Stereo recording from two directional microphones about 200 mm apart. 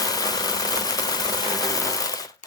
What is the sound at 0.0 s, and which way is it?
Engine, 20° left (ahead or behind).